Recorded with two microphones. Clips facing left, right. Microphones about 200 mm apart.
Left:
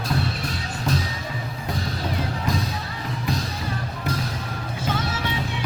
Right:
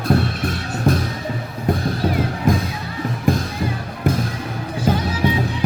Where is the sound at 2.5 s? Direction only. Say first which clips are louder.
Right 8 dB; 50° right (ahead or behind).